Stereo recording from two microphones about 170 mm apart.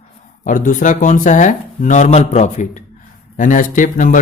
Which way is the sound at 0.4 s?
50° left (ahead or behind).